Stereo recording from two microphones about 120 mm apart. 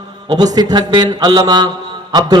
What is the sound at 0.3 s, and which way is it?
A man's voice, 35° right (ahead or behind).